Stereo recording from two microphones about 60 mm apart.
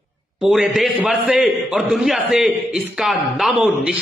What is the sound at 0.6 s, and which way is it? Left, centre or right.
A man's voice, centre.